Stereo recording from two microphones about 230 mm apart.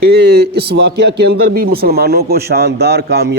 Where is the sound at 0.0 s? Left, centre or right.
Right.